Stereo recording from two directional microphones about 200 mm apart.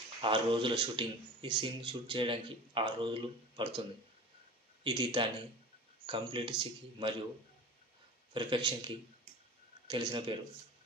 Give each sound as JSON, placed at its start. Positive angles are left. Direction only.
{"t": 0.2, "sound": "speech", "side_deg": -25}
{"t": 4.8, "sound": "speech", "side_deg": -25}
{"t": 8.3, "sound": "speech", "side_deg": -25}